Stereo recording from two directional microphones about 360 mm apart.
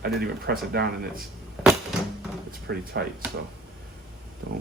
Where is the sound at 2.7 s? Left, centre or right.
Right.